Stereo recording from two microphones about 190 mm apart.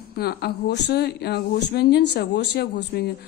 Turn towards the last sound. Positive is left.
turn(degrees=60)  # may be behind; listen again after turning